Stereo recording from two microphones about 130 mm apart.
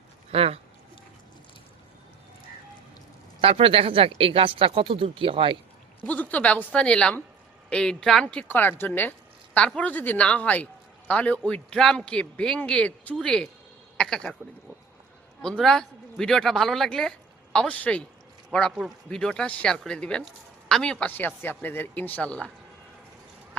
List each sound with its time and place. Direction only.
0.3 s speech: 50° right (ahead or behind)
3.4 s speech: 50° right (ahead or behind)
6.1 s a man's voice: 10° left (ahead or behind)
13.9 s a sound: 5° left (ahead or behind)
15.4 s a man's voice: 5° left (ahead or behind)